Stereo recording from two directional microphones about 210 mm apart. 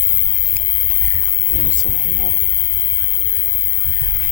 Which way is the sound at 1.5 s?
35° right (ahead or behind).